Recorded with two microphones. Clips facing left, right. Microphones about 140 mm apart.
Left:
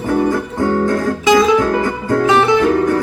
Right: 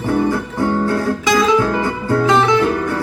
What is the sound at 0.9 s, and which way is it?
Guitar, 45° left (ahead or behind).